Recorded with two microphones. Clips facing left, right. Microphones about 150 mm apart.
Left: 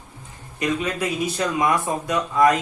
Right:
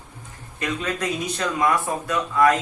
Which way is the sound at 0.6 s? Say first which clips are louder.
Left 3 dB; 10° left (ahead or behind).